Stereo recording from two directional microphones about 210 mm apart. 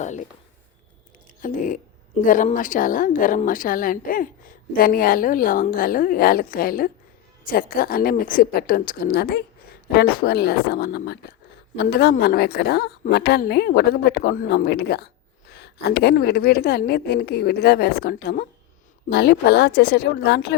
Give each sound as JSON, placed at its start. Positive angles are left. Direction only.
{"t": 0.0, "sound": "speech", "side_deg": 35}
{"t": 1.4, "sound": "a woman's voice", "side_deg": 40}